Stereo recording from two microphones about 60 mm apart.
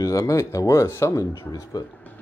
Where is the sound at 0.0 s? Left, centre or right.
Left.